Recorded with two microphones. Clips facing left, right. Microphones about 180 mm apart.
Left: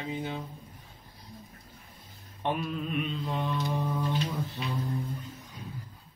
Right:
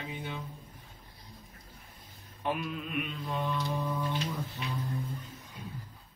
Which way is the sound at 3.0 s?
25° left (ahead or behind).